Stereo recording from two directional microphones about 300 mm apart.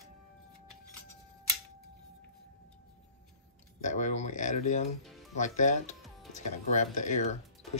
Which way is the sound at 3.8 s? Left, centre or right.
Left.